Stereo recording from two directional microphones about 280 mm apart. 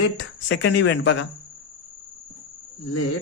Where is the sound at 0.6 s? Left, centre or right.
Left.